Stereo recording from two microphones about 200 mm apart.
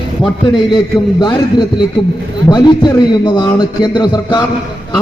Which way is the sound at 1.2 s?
20° left (ahead or behind).